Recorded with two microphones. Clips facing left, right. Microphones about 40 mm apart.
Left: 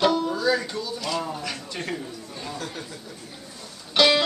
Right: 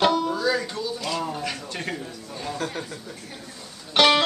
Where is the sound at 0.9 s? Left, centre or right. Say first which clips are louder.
Left 1 dB; centre.